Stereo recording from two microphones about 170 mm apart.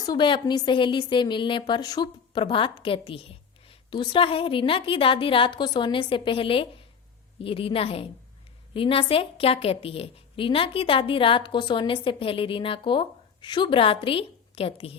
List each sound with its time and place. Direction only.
0.0 s a woman's voice: 25° left (ahead or behind)